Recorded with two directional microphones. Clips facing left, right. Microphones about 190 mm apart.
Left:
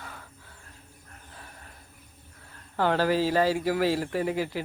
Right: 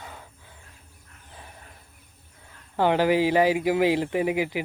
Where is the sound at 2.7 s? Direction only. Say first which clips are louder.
Right 3 dB; 15° right (ahead or behind).